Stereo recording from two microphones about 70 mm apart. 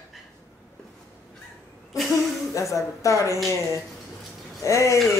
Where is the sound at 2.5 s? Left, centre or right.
Left.